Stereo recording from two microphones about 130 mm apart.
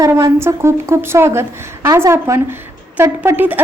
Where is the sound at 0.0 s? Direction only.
20° right (ahead or behind).